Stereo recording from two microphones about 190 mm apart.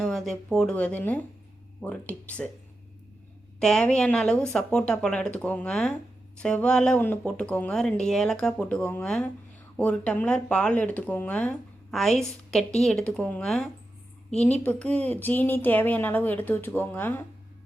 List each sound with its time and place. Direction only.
0.0 s speech: centre (ahead or behind)
3.6 s a woman's voice: 5° left (ahead or behind)